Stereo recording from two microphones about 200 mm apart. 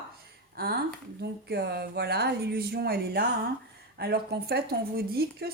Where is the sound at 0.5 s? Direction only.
50° right (ahead or behind).